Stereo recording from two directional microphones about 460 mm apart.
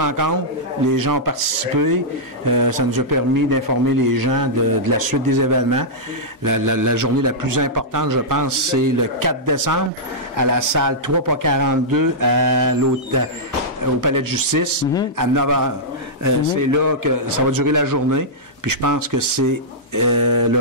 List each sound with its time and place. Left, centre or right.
0.0 s a man's voice: right
2.4 s a man's voice: right